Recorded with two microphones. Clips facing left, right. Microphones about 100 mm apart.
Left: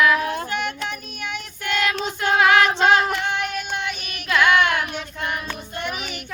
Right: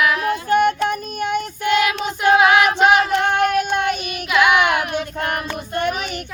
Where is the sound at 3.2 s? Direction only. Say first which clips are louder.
Right 8 dB; 55° right (ahead or behind).